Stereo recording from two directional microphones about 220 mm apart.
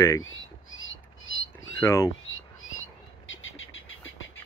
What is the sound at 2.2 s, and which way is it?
Bird, 65° left (ahead or behind).